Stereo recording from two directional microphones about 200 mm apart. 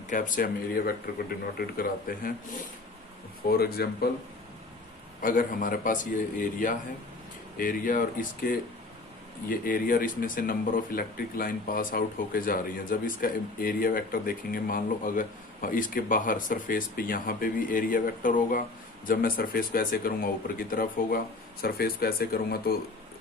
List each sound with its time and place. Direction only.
0.1 s speech: 40° left (ahead or behind)
3.5 s speech: 50° left (ahead or behind)
5.2 s a man's voice: 45° left (ahead or behind)